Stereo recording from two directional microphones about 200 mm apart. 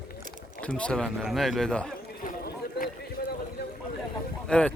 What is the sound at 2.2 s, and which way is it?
Run, 45° left (ahead or behind).